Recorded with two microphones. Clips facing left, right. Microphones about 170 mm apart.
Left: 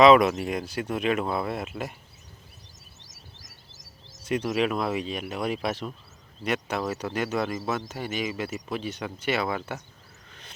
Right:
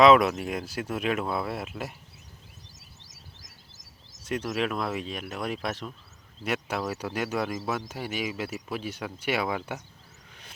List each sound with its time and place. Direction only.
0.0 s speech: centre (ahead or behind)
2.7 s a sound: 65° right (ahead or behind)
4.2 s speech: centre (ahead or behind)